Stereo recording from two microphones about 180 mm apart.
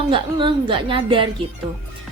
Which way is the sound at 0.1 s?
25° right (ahead or behind).